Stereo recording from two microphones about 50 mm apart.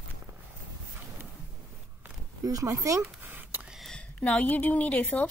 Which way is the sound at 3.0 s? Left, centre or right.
Right.